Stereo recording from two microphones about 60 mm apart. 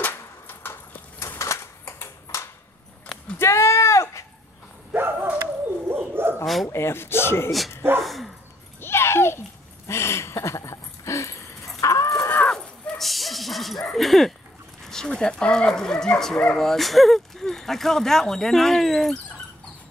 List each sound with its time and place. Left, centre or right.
0.1 s a sound: left
1.4 s typewriter: left
2.3 s a sound: left
3.3 s sheep: left
4.9 s bow-wow: right
5.9 s dog: right
6.4 s bow-wow: centre
6.7 s speech: left
8.0 s dog: centre
8.8 s a sound: left
11.8 s chicken: left
12.4 s dog: centre
14.9 s speech: centre